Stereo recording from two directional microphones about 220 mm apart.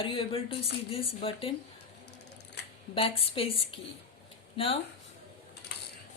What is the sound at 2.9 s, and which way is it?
Speech, 25° left (ahead or behind).